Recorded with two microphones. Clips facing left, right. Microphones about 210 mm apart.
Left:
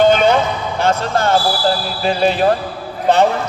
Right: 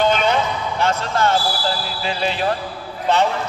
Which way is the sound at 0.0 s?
45° left (ahead or behind).